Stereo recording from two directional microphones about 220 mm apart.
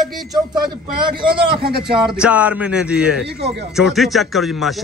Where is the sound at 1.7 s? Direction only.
45° right (ahead or behind).